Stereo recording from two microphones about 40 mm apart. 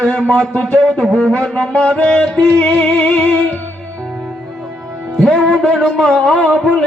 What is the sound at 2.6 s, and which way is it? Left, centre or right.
Music, left.